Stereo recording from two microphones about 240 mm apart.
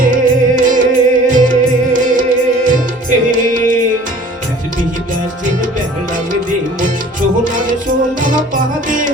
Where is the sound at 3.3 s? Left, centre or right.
Right.